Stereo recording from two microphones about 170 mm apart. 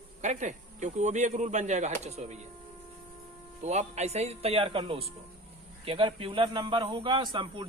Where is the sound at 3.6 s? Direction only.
40° right (ahead or behind).